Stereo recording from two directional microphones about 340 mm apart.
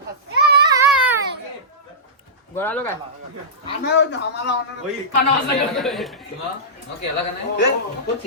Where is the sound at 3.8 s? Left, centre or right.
Left.